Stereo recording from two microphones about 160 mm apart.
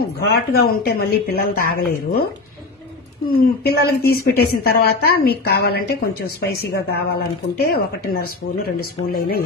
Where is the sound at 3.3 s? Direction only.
80° left.